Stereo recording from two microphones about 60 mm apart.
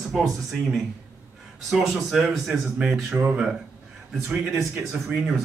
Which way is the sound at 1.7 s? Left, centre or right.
Centre.